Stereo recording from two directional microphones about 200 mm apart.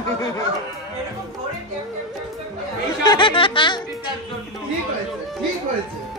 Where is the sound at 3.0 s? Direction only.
20° left (ahead or behind).